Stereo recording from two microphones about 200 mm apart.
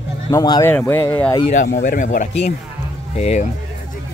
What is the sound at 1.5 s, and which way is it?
Speech, 40° left (ahead or behind).